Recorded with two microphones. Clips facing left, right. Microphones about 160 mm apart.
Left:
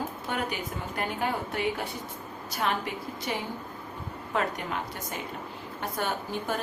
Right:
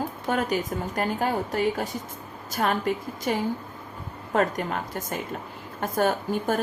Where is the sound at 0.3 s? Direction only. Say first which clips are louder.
Right 9 dB; 40° right (ahead or behind).